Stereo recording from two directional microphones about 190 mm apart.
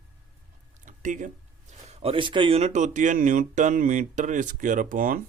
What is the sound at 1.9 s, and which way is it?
Speech, 30° right (ahead or behind).